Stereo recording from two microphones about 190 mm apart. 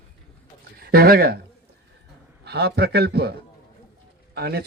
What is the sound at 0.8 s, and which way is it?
Speech, 50° right (ahead or behind).